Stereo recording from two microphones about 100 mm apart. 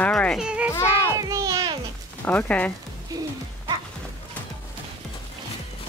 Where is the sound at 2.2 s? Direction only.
15° left (ahead or behind).